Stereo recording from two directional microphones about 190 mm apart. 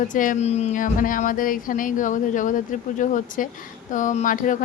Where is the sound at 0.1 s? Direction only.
45° left (ahead or behind).